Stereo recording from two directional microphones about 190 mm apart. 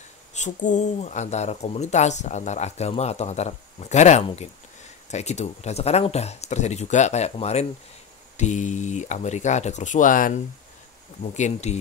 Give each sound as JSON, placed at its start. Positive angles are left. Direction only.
{"t": 0.3, "sound": "speech", "side_deg": 40}